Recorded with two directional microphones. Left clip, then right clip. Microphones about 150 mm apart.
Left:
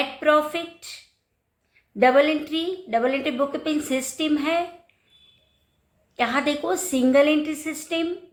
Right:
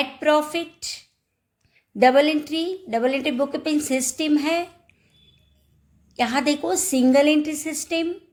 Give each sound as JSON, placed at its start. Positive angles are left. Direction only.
{"t": 0.0, "sound": "a woman's voice", "side_deg": -60}
{"t": 6.1, "sound": "a woman's voice", "side_deg": -60}